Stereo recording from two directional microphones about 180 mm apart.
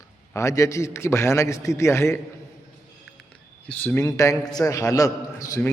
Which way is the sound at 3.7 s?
10° left (ahead or behind).